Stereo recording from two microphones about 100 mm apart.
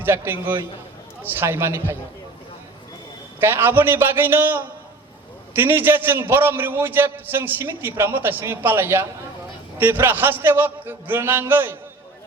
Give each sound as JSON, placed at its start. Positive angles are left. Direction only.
{"t": 0.0, "sound": "a man's voice", "side_deg": -20}
{"t": 3.4, "sound": "a man's voice", "side_deg": -20}